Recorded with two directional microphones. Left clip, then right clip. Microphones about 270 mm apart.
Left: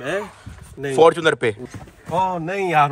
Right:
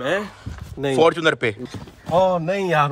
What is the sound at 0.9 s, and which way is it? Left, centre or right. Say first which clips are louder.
Speech: left 2 dB; centre.